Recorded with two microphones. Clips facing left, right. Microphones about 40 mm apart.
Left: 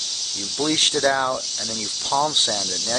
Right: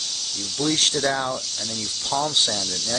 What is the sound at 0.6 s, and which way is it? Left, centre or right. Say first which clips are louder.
Speech: left 2 dB; centre.